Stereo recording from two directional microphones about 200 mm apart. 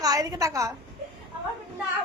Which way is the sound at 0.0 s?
20° right (ahead or behind).